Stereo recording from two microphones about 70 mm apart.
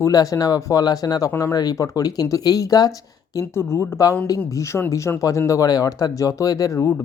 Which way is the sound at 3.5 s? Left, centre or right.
Left.